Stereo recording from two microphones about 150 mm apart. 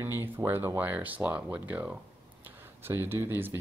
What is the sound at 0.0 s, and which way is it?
Speech, 15° right (ahead or behind).